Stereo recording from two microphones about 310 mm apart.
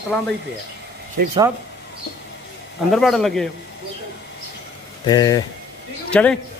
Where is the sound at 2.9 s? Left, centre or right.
Centre.